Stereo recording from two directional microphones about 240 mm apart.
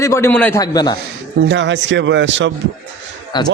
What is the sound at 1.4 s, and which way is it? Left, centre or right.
A man's voice, right.